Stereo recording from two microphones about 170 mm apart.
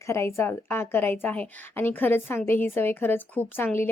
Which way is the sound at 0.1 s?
15° left (ahead or behind).